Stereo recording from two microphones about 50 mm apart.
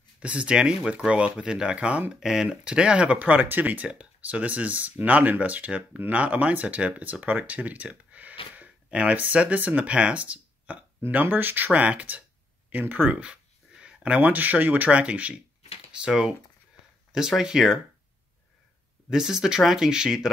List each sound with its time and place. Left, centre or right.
0.2 s speech: right
2.1 s speech: centre
3.2 s speech: right
11.1 s speech: right
13.1 s a sound: right
14.3 s speech: right; by 17.7 s centre
19.0 s speech: centre